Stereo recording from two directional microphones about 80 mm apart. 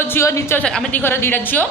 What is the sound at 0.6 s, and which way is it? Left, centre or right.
Speech, centre.